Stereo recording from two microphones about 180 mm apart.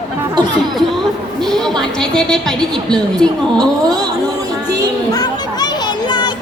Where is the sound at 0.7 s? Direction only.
Centre (ahead or behind).